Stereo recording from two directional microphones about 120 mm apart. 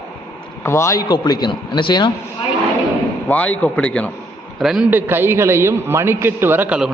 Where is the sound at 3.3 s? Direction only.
10° left (ahead or behind).